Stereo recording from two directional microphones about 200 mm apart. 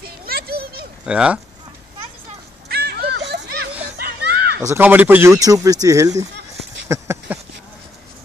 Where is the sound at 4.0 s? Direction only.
55° right (ahead or behind).